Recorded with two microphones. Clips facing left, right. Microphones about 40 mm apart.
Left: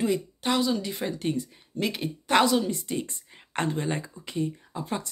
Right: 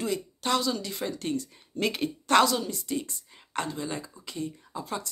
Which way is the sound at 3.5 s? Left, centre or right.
Left.